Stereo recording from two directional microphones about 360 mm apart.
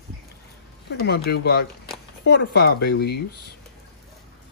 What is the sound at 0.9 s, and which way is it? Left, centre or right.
Speech, left.